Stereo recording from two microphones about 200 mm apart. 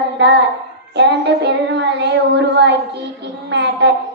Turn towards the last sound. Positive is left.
turn(degrees=-60)  # may be behind; listen again after turning